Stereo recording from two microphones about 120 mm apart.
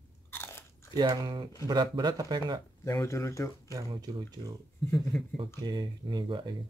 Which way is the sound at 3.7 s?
35° right (ahead or behind).